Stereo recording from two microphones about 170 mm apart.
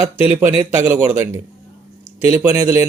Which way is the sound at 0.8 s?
15° right (ahead or behind).